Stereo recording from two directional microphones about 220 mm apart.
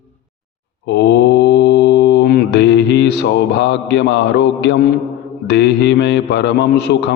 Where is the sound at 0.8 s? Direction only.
50° left (ahead or behind).